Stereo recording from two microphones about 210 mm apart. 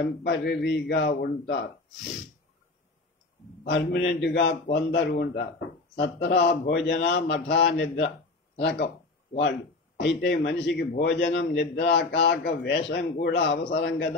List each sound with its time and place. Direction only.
0.2 s a man's voice: 50° left (ahead or behind)
3.6 s a man's voice: 55° left (ahead or behind)
9.9 s a man's voice: 50° left (ahead or behind)